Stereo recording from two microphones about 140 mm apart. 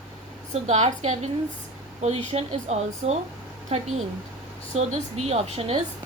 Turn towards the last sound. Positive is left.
turn(degrees=-45)  # may be behind; listen again after turning